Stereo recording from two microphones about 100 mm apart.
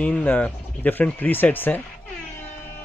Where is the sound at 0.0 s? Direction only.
15° left (ahead or behind).